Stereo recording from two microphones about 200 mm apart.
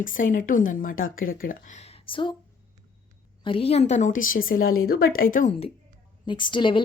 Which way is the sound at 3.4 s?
25° left (ahead or behind).